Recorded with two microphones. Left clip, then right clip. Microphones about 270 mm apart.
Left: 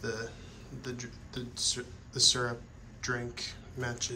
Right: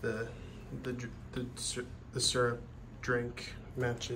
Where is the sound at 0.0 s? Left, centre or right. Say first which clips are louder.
Even; centre.